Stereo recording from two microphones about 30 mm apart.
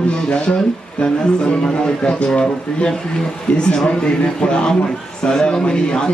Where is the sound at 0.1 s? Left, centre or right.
Left.